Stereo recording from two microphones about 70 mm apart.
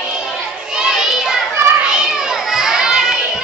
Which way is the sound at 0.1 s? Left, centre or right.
Centre.